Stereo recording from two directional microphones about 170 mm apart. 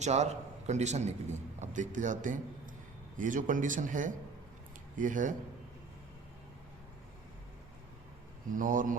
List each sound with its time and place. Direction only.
0.0 s a man's voice: 40° right (ahead or behind)
8.5 s a man's voice: 50° right (ahead or behind)